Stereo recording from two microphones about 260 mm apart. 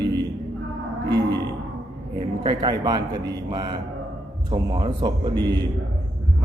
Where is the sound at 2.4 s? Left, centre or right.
Centre.